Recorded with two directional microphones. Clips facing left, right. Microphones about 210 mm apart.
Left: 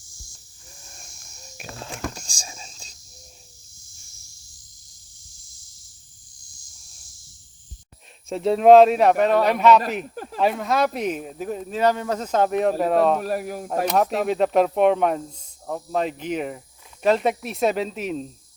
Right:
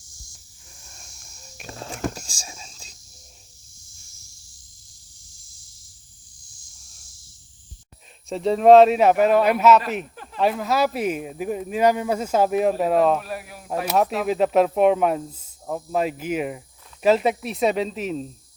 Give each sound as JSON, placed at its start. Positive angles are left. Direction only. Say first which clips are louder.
{"t": 2.1, "sound": "whispering", "louder": "right 1 dB", "side_deg": -5}
{"t": 8.3, "sound": "speech", "louder": "even", "side_deg": 0}
{"t": 13.2, "sound": "speech", "louder": "left 8 dB", "side_deg": 45}
{"t": 13.8, "sound": "speech", "louder": "even", "side_deg": 0}